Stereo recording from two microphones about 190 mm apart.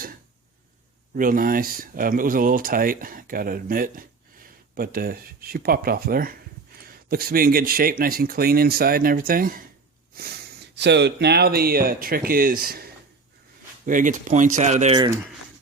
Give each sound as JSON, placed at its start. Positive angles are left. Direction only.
{"t": 1.1, "sound": "speech", "side_deg": -45}
{"t": 10.8, "sound": "speech", "side_deg": -65}
{"t": 14.9, "sound": "speech", "side_deg": -20}